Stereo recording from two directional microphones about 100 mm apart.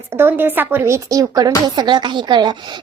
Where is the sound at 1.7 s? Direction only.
50° right (ahead or behind).